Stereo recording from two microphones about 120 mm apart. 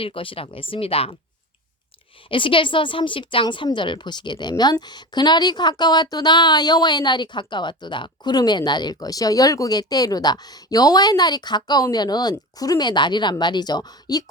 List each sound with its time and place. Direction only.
0.0 s speech: 45° left (ahead or behind)
2.3 s a woman's voice: 45° left (ahead or behind)